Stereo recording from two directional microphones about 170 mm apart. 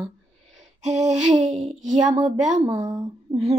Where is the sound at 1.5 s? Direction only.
45° right (ahead or behind).